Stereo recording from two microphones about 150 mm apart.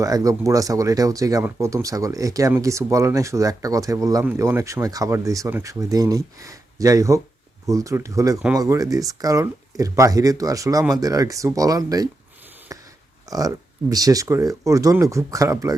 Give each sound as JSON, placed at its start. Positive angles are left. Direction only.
{"t": 0.0, "sound": "speech", "side_deg": -25}
{"t": 13.3, "sound": "speech", "side_deg": -25}